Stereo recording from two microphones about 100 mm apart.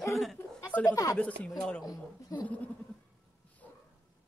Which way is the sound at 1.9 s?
40° left (ahead or behind).